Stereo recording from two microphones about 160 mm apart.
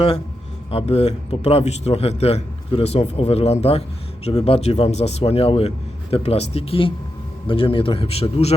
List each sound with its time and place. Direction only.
0.7 s a man's voice: 40° left (ahead or behind)